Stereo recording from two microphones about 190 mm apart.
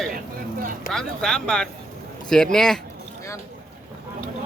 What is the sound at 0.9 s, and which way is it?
Speech, 5° left (ahead or behind).